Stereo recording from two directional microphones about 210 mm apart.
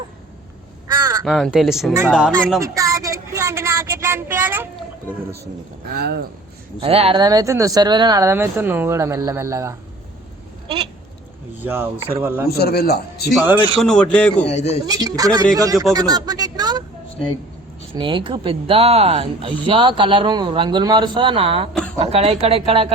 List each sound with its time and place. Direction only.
0.9 s crow: 15° right (ahead or behind)
1.2 s speech: centre (ahead or behind)
2.6 s a sound: 15° right (ahead or behind)
5.9 s speech: 50° right (ahead or behind)
6.7 s speech: 25° right (ahead or behind)
11.6 s speech: 10° right (ahead or behind)
12.5 s a man's voice: 50° left (ahead or behind)
13.4 s speech: 10° right (ahead or behind)
13.7 s speech: 5° left (ahead or behind)
14.4 s speech: 30° left (ahead or behind)
14.8 s speech: 15° right (ahead or behind)
17.9 s speech: 25° right (ahead or behind)